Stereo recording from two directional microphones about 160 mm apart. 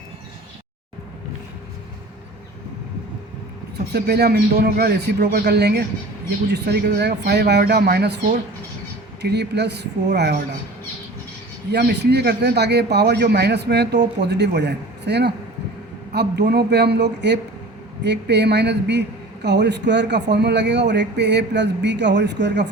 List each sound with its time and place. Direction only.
3.9 s a man's voice: 85° right
9.2 s a man's voice: 90° right
11.7 s a man's voice: 90° right